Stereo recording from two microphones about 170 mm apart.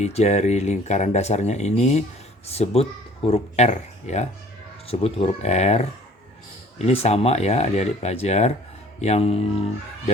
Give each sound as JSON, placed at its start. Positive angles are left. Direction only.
{"t": 0.0, "sound": "speech", "side_deg": 40}